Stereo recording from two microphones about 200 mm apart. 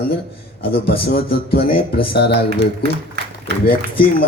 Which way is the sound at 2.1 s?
55° left (ahead or behind).